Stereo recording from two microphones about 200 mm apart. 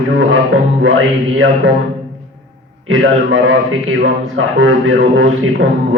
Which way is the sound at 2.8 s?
75° right (ahead or behind).